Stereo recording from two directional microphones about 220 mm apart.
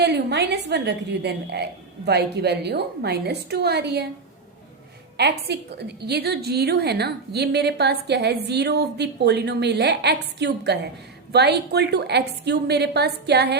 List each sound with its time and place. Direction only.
0.0 s a woman's voice: 50° right (ahead or behind)
5.1 s a woman's voice: 50° right (ahead or behind)